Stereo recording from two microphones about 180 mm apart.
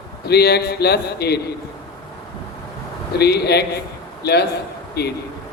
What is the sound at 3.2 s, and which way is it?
A man's voice, 65° left (ahead or behind).